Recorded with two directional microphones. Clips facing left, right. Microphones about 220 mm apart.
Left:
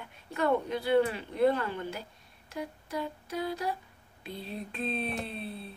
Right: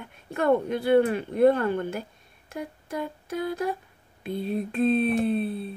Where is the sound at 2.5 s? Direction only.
50° right (ahead or behind).